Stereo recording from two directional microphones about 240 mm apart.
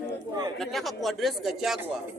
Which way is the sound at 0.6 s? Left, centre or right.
Centre.